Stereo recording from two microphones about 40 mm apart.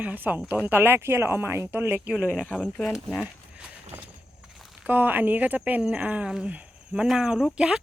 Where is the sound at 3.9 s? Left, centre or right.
Right.